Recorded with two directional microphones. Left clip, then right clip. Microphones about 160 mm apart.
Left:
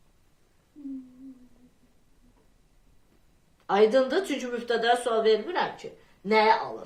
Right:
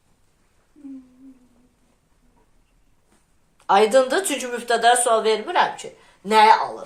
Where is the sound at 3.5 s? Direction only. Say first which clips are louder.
Right 6 dB; 30° left (ahead or behind).